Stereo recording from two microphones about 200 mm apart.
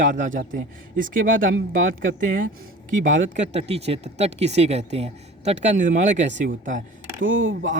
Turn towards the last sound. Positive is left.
turn(degrees=-75)  # may be behind; listen again after turning